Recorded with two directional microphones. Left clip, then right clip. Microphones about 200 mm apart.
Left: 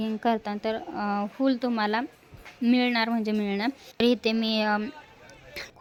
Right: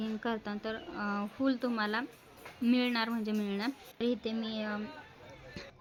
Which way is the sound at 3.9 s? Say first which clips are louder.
Left 12 dB; 45° left (ahead or behind).